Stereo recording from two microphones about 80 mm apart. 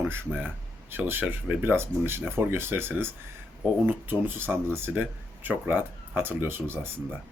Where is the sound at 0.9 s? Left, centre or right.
Right.